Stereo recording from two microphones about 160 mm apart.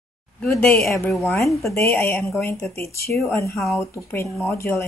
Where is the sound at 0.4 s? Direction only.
5° left (ahead or behind).